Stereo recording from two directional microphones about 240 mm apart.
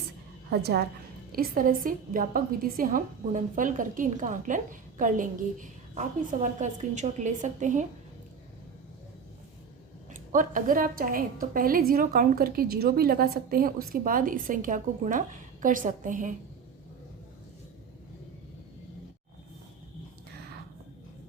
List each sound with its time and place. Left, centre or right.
0.5 s a woman's voice: right
10.1 s a woman's voice: right